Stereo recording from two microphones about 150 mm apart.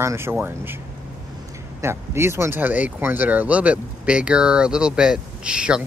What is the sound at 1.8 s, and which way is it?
Speech, 15° right (ahead or behind).